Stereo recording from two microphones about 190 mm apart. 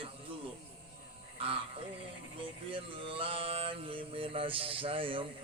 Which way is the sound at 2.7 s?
30° right (ahead or behind).